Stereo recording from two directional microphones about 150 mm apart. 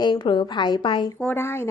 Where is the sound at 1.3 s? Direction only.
15° left (ahead or behind).